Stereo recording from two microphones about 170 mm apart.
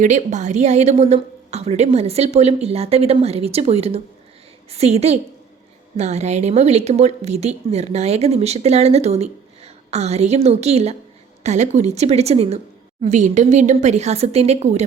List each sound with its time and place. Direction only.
0.0 s speech: 50° right (ahead or behind)